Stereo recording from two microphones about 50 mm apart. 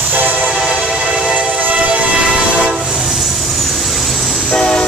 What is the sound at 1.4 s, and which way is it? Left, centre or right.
Train, right.